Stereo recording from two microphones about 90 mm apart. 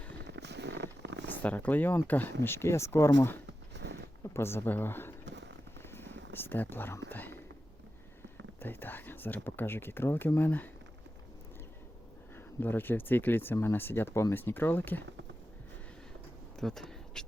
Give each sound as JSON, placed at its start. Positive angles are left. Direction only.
{"t": 1.3, "sound": "speech", "side_deg": 20}
{"t": 4.2, "sound": "speech", "side_deg": 30}
{"t": 5.9, "sound": "a sound", "side_deg": 25}
{"t": 8.6, "sound": "speech", "side_deg": 20}
{"t": 12.5, "sound": "speech", "side_deg": 20}
{"t": 16.6, "sound": "a sound", "side_deg": 5}